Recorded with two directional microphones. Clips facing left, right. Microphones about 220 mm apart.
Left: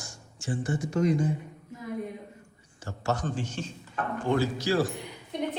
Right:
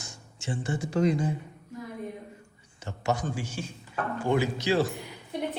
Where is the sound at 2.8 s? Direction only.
15° right (ahead or behind).